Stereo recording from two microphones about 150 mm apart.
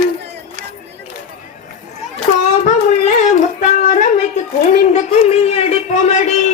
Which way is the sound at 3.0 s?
50° left (ahead or behind).